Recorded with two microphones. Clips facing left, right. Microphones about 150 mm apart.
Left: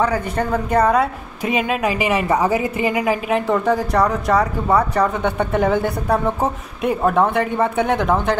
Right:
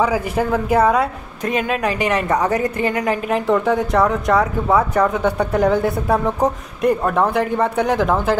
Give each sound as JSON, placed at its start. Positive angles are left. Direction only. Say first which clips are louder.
{"t": 0.0, "sound": "a woman's voice", "louder": "right 1 dB", "side_deg": -5}